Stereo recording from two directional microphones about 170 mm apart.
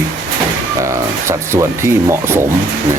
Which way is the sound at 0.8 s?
15° right (ahead or behind).